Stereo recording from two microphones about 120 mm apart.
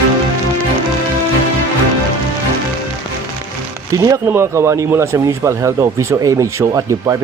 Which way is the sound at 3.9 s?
25° right (ahead or behind).